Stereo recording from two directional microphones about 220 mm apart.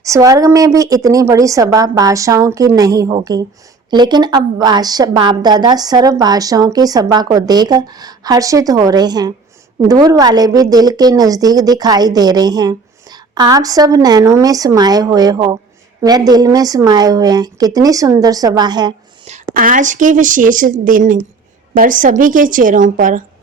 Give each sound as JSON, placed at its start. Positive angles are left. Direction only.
{"t": 0.0, "sound": "a woman's voice", "side_deg": -15}
{"t": 19.5, "sound": "a woman's voice", "side_deg": -35}